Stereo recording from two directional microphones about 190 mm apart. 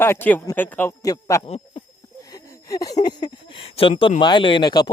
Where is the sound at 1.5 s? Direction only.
35° left (ahead or behind).